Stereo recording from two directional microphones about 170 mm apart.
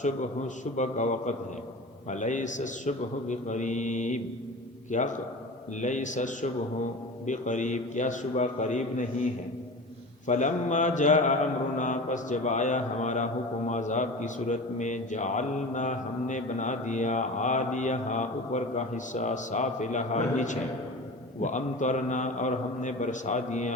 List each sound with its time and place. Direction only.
0.0 s a man's voice: 45° left (ahead or behind)